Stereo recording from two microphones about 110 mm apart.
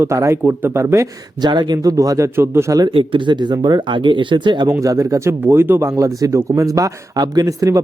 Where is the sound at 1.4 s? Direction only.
40° right (ahead or behind); by 2.8 s 25° right (ahead or behind).